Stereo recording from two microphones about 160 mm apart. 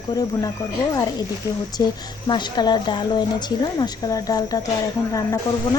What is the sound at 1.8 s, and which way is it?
Speech, 25° left (ahead or behind).